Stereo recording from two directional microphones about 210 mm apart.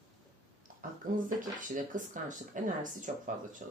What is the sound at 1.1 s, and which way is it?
Speech, 40° right (ahead or behind).